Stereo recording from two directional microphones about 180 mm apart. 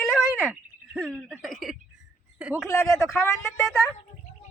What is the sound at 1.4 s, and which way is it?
Speech, centre (ahead or behind).